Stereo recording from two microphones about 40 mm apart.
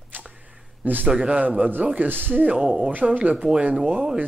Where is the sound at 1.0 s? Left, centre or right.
Right.